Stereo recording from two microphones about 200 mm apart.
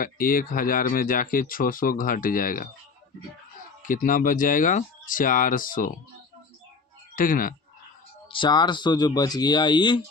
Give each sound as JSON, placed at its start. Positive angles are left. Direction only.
{"t": 0.0, "sound": "speech", "side_deg": 45}
{"t": 3.8, "sound": "speech", "side_deg": 45}
{"t": 7.2, "sound": "speech", "side_deg": 45}
{"t": 8.3, "sound": "speech", "side_deg": 25}